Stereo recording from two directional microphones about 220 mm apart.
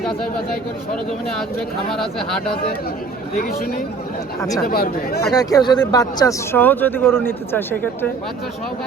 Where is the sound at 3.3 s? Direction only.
40° left (ahead or behind).